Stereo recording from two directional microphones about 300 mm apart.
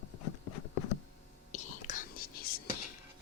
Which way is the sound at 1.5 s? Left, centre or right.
Left.